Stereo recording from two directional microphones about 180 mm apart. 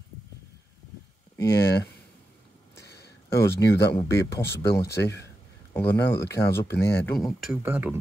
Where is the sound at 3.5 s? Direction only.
65° left (ahead or behind).